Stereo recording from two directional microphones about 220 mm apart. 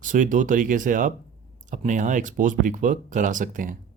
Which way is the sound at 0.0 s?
35° right (ahead or behind).